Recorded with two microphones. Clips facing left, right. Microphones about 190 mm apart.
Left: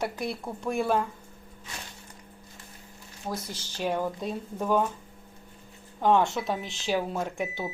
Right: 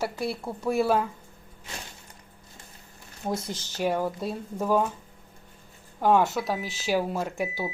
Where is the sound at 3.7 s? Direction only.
10° right (ahead or behind).